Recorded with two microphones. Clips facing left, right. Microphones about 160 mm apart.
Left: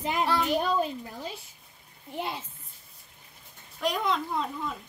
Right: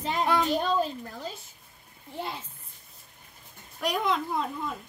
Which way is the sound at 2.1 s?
20° left (ahead or behind).